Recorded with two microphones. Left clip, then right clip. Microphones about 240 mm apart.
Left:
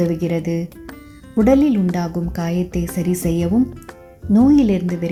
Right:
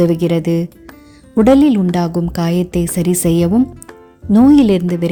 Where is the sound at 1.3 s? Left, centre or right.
Right.